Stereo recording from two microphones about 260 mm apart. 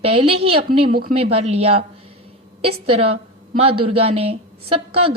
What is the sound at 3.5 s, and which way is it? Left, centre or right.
Speech, right.